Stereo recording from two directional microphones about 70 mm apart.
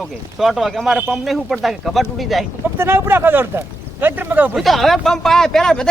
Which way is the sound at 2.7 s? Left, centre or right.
Right.